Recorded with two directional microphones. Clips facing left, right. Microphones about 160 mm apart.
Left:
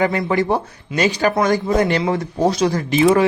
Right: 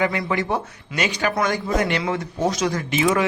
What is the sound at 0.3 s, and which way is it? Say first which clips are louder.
Speech: left 5 dB; 35° left (ahead or behind).